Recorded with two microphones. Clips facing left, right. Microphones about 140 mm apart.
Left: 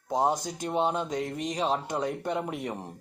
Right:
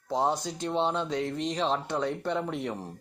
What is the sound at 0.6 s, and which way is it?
Speech, 10° left (ahead or behind).